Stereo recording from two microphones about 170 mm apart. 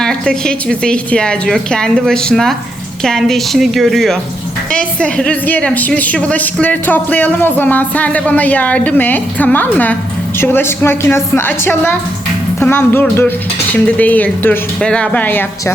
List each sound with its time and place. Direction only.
0.0 s a woman's voice: 5° left (ahead or behind)